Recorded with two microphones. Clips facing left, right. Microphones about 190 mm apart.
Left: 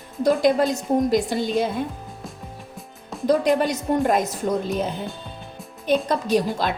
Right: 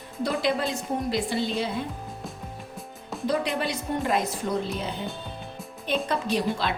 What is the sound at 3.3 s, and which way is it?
Speech, 45° left (ahead or behind).